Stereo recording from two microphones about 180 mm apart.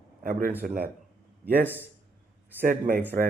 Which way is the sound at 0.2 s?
50° right (ahead or behind).